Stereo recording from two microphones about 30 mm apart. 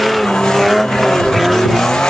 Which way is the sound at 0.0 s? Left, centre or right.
Centre.